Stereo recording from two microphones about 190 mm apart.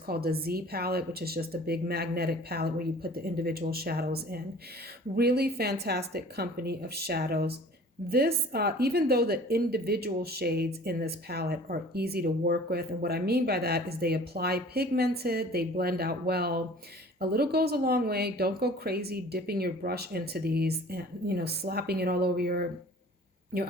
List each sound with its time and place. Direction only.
0.1 s speech: 55° right (ahead or behind)